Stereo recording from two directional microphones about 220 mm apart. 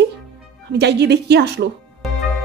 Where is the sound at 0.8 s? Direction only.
50° right (ahead or behind).